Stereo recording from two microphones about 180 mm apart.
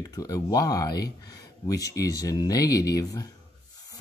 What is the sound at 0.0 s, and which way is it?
Speech, 20° left (ahead or behind).